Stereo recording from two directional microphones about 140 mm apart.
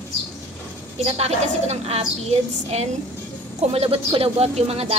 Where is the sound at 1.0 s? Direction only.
45° right (ahead or behind).